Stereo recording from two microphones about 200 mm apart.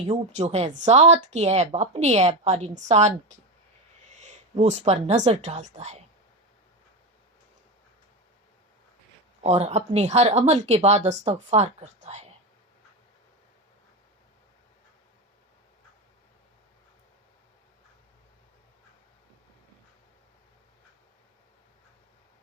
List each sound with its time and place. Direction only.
0.1 s a woman's voice: 35° right (ahead or behind)
9.4 s a woman's voice: 35° right (ahead or behind)